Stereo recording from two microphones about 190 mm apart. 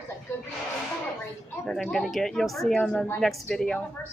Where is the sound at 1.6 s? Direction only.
Centre (ahead or behind).